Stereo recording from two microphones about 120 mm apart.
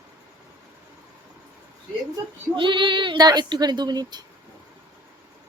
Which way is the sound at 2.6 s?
45° right (ahead or behind).